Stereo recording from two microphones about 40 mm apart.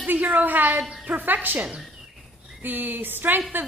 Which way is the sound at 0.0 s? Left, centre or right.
Right.